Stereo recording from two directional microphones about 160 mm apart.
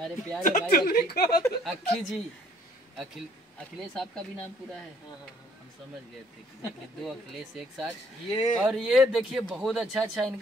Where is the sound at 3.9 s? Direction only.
Centre (ahead or behind).